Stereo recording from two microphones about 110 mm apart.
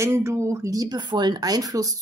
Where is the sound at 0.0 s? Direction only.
25° right (ahead or behind).